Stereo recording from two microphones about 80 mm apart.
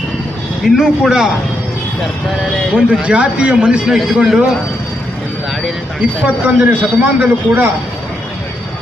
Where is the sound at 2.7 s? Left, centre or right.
Centre.